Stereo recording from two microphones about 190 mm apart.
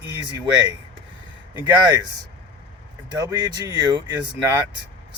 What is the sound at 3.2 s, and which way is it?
Speech, 20° right (ahead or behind).